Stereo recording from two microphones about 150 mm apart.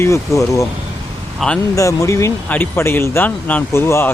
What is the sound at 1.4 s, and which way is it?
Speech, centre (ahead or behind).